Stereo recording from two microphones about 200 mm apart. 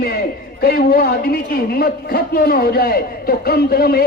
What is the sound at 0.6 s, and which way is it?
A man's voice, 50° left (ahead or behind).